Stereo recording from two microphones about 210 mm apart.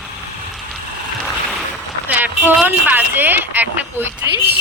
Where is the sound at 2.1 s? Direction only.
5° right (ahead or behind).